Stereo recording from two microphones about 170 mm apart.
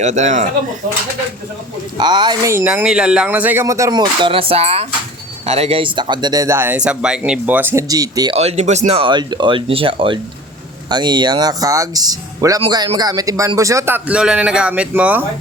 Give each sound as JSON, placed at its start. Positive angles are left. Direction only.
{"t": 0.0, "sound": "speech", "side_deg": -45}
{"t": 2.0, "sound": "speech", "side_deg": -25}
{"t": 8.4, "sound": "speech", "side_deg": -40}